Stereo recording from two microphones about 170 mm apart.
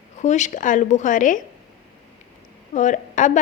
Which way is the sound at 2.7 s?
45° left (ahead or behind).